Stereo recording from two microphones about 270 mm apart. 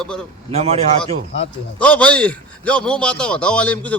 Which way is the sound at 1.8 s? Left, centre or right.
Centre.